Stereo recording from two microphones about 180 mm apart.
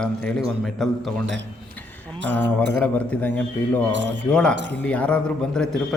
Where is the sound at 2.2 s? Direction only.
80° right.